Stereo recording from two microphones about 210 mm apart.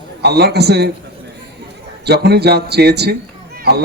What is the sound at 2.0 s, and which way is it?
A man's voice, 50° right (ahead or behind).